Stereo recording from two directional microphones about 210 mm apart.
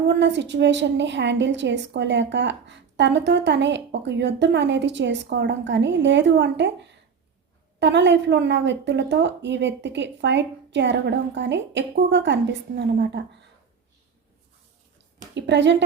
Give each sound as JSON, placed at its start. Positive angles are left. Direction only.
{"t": 0.1, "sound": "a woman's voice", "side_deg": -55}
{"t": 7.8, "sound": "a woman's voice", "side_deg": -55}
{"t": 15.4, "sound": "a woman's voice", "side_deg": -55}